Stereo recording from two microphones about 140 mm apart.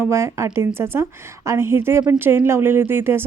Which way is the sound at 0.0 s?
20° right (ahead or behind).